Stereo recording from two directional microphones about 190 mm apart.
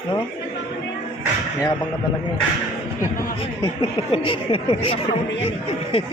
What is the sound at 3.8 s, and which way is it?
A man's voice, 25° left (ahead or behind).